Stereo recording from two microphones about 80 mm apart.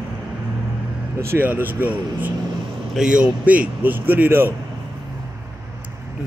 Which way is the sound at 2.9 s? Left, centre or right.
Centre.